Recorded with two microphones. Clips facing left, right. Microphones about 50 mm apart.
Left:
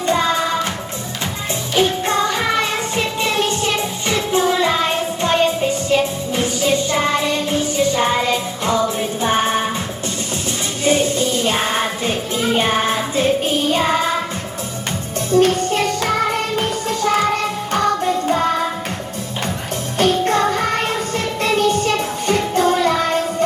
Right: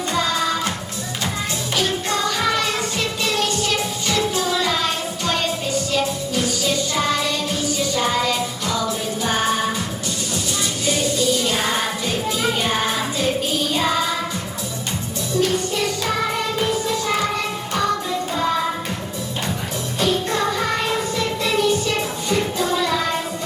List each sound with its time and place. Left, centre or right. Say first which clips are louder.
0.1 s music: left 4 dB; left
1.7 s music: left 6 dB; left
10.8 s music: left 4 dB; left
15.3 s music: left 6 dB; left
16.9 s music: left 4 dB; left
20.0 s music: left 5 dB; left